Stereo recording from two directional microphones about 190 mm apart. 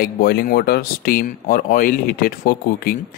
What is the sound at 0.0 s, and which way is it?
Speech, 55° left (ahead or behind).